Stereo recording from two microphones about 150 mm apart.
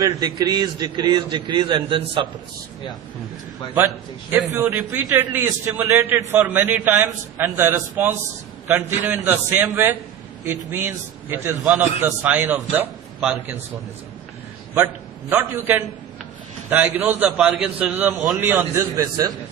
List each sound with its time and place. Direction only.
0.0 s a man's voice: 25° right (ahead or behind)
4.4 s a man's voice: 10° right (ahead or behind)
15.3 s a man's voice: 15° right (ahead or behind)